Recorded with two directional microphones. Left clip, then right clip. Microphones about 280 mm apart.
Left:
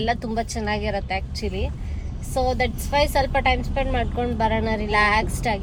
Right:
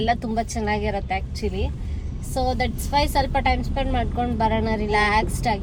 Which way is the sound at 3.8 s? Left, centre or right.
Left.